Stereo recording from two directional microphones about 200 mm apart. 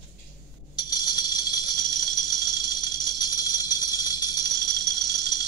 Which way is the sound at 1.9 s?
20° left (ahead or behind).